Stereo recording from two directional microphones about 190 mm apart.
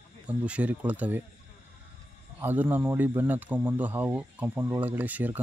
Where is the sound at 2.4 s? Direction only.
10° right (ahead or behind).